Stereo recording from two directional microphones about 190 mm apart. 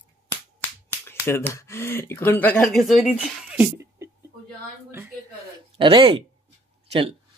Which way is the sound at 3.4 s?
10° right (ahead or behind).